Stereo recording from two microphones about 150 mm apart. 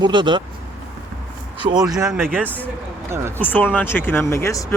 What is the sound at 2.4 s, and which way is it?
Speech, 10° left (ahead or behind).